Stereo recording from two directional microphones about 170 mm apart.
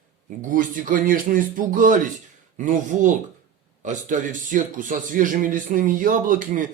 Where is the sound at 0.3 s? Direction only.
50° right (ahead or behind).